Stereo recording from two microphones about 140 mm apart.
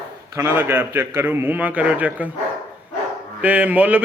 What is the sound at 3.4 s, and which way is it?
Speech, 10° right (ahead or behind).